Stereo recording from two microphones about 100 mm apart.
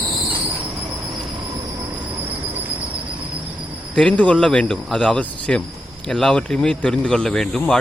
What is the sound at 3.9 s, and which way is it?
Speech, 10° left (ahead or behind).